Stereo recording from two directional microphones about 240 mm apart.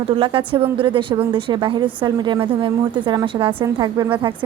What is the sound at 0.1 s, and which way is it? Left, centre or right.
A woman's voice, right.